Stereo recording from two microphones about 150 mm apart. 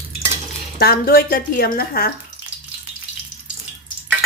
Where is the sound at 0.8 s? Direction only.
85° left.